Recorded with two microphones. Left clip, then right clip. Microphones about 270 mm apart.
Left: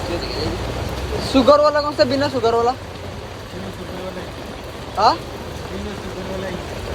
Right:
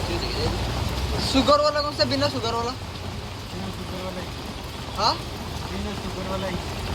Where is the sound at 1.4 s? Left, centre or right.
Right.